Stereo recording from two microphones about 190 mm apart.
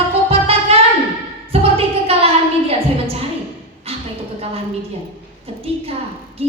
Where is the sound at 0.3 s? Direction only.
30° right (ahead or behind).